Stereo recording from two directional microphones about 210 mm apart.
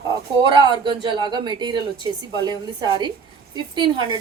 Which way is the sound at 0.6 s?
20° right (ahead or behind).